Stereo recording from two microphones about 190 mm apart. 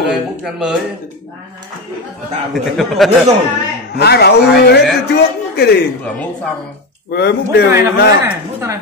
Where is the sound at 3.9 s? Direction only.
60° left (ahead or behind).